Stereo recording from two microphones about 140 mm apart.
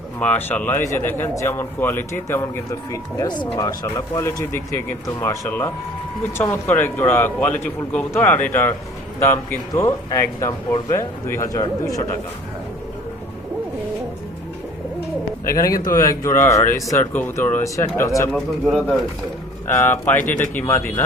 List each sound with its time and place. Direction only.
0.2 s a man's voice: 10° left (ahead or behind)
15.5 s a man's voice: 25° left (ahead or behind)
18.3 s speech: 5° left (ahead or behind)
19.6 s a man's voice: 15° left (ahead or behind)